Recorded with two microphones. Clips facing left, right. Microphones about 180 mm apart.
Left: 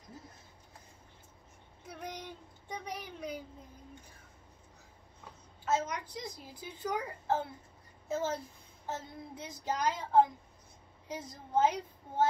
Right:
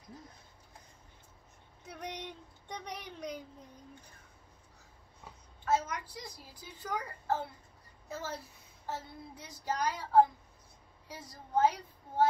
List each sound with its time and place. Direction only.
1.9 s a sound: 5° left (ahead or behind)
2.7 s a woman's voice: 5° left (ahead or behind)
5.7 s a woman's voice: 20° left (ahead or behind)